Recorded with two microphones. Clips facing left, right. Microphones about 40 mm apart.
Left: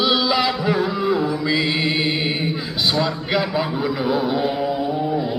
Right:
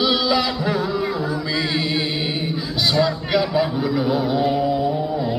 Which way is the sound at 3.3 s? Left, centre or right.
Centre.